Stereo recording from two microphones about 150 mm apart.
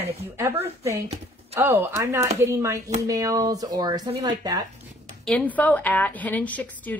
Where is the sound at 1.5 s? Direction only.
15° right (ahead or behind).